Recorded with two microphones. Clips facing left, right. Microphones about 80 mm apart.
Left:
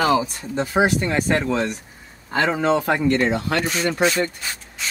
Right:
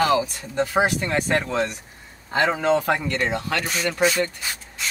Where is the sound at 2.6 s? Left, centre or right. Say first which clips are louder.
Left 2 dB; left.